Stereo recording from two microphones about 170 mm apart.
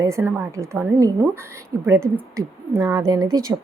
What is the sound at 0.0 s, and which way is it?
A woman's voice, 15° right (ahead or behind).